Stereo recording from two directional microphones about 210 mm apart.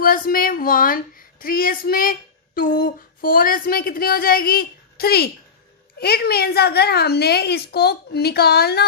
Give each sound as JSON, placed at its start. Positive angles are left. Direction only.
{"t": 0.0, "sound": "a woman's voice", "side_deg": 45}